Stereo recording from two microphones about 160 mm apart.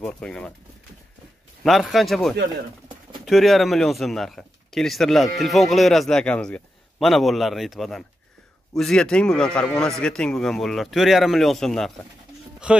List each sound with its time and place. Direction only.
0.0 s speech: 5° left (ahead or behind)
1.6 s speech: centre (ahead or behind)